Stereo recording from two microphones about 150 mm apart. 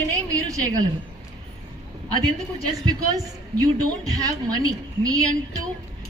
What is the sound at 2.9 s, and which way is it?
A woman's voice, 25° right (ahead or behind).